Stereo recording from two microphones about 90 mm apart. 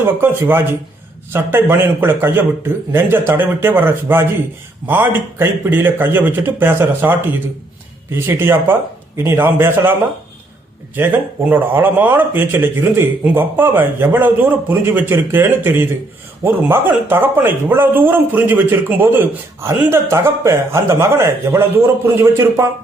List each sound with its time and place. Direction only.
0.0 s a man's voice: 25° right (ahead or behind)